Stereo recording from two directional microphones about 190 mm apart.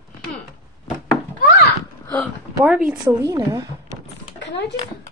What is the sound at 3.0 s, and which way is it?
Speech, 20° right (ahead or behind).